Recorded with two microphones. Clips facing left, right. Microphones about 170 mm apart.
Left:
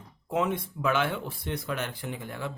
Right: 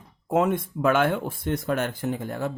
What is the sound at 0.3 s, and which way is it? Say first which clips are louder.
Speech: right 6 dB; 50° right (ahead or behind).